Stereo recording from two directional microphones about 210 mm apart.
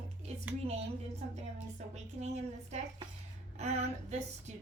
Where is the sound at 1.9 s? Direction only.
30° right (ahead or behind).